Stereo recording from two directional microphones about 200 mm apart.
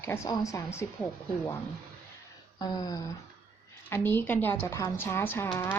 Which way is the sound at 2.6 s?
20° left (ahead or behind).